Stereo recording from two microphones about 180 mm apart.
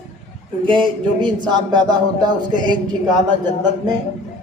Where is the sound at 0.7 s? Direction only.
25° right (ahead or behind).